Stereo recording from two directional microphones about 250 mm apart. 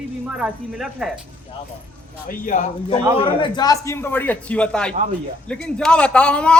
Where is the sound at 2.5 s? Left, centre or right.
Left.